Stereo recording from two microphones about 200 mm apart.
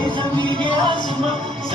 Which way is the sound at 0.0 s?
25° right (ahead or behind).